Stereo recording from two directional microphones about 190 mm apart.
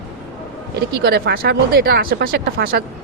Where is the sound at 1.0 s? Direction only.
55° right (ahead or behind).